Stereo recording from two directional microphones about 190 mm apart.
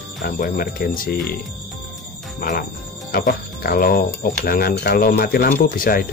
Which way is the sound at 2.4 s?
50° left (ahead or behind).